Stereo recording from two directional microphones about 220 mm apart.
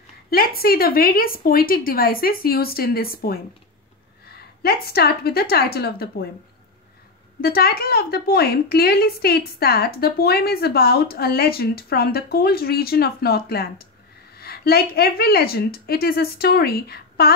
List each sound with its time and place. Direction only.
0.3 s speech: 45° left (ahead or behind)
7.4 s speech: 45° left (ahead or behind)